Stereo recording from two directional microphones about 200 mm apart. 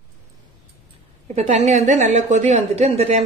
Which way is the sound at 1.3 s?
35° right (ahead or behind).